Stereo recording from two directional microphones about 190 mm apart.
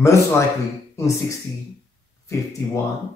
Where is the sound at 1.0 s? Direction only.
15° left (ahead or behind).